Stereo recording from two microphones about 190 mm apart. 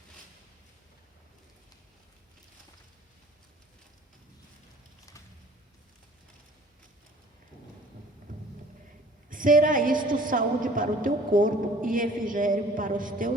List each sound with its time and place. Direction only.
8.3 s thunder: 45° right (ahead or behind)
9.3 s a woman's voice: 45° right (ahead or behind)